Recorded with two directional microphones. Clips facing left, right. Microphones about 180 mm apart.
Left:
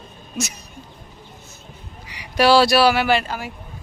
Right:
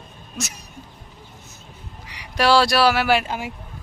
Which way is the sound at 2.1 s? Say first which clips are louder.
Left 3 dB; 5° left (ahead or behind).